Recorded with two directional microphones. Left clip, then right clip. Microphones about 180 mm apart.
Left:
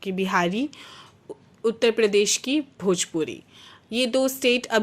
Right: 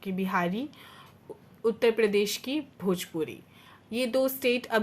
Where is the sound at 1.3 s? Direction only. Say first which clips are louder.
Left 5 dB; 30° left (ahead or behind).